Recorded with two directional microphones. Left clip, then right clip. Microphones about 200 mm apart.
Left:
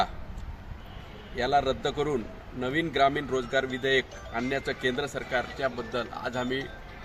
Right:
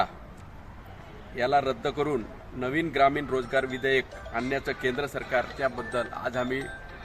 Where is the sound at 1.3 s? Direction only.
Centre (ahead or behind).